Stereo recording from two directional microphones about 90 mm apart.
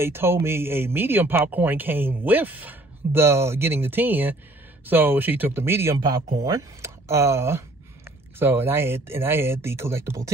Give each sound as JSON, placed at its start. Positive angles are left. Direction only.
{"t": 0.0, "sound": "speech", "side_deg": -25}
{"t": 5.9, "sound": "speech", "side_deg": -45}